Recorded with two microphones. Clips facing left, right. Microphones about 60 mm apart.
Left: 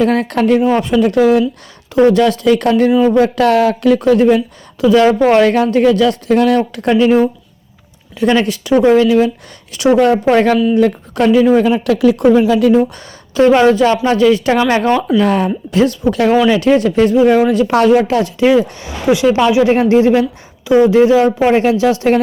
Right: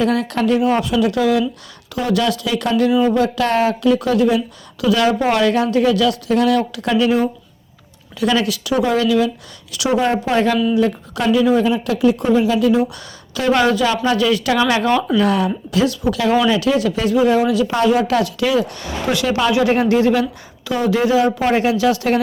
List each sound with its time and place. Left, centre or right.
0.0 s speech: left
8.2 s speech: left
10.3 s speech: left
13.5 s speech: left
17.7 s speech: left
18.1 s speech: left
21.2 s speech: centre
21.5 s speech: left